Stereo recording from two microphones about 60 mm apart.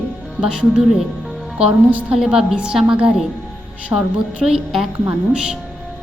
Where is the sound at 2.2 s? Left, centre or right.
Centre.